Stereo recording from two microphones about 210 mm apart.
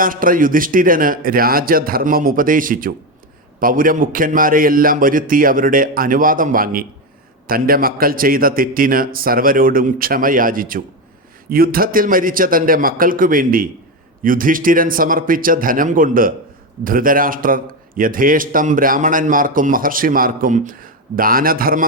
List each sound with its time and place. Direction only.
0.0 s a man's voice: 40° right (ahead or behind)